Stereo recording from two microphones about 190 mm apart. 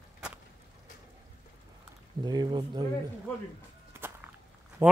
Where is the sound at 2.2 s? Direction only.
20° right (ahead or behind).